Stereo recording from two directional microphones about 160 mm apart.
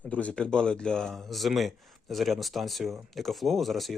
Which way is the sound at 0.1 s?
10° left (ahead or behind).